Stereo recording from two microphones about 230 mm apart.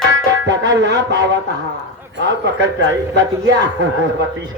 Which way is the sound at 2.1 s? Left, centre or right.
Right.